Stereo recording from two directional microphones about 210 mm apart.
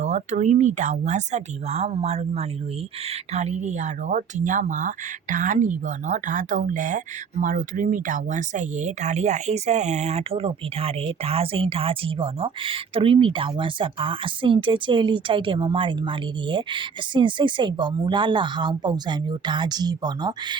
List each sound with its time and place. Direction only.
0.0 s speech: 35° right (ahead or behind)